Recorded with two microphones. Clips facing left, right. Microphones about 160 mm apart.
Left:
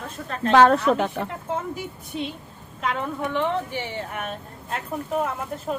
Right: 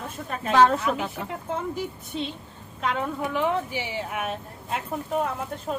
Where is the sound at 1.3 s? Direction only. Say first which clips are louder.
Left 1 dB; 10° left (ahead or behind).